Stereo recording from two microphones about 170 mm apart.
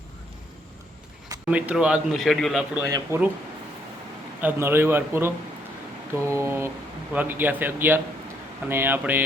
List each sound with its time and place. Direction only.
1.5 s speech: 5° right (ahead or behind)
2.7 s a man's voice: 15° right (ahead or behind)
4.4 s a man's voice: 10° right (ahead or behind)